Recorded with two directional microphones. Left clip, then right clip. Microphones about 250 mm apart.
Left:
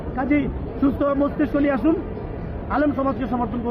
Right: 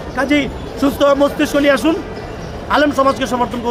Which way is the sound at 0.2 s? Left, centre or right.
Right.